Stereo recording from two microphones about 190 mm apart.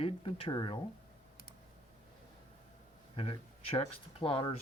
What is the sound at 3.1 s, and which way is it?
Speech, 30° left (ahead or behind).